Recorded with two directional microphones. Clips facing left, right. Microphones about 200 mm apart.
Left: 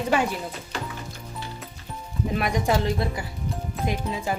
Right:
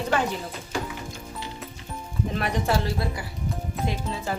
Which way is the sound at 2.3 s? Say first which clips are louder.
Left 2 dB; 10° left (ahead or behind).